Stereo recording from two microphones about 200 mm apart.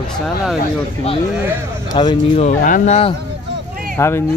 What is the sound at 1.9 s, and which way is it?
Speech, 25° left (ahead or behind).